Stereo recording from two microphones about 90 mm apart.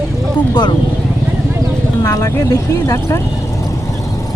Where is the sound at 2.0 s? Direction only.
40° left (ahead or behind).